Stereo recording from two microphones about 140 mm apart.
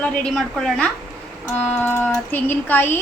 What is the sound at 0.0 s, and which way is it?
A woman's voice, 5° left (ahead or behind).